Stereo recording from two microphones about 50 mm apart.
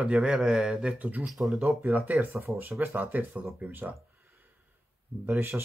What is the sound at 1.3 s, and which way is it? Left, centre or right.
Speech, centre.